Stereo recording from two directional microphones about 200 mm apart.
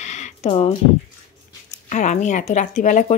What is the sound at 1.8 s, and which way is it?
Speech, 35° left (ahead or behind).